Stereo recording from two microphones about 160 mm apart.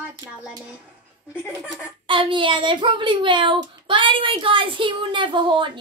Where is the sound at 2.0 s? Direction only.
30° right (ahead or behind).